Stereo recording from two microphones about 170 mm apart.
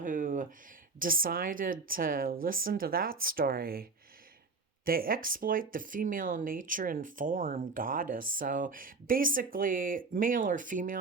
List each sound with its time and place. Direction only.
0.0 s a sound: 50° right (ahead or behind)
0.9 s speech: 55° right (ahead or behind)
4.9 s speech: 60° right (ahead or behind)